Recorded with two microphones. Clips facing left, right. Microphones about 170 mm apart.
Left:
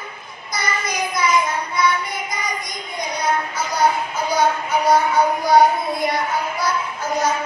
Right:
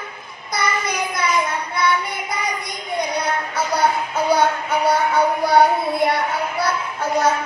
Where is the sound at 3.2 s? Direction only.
60° right (ahead or behind).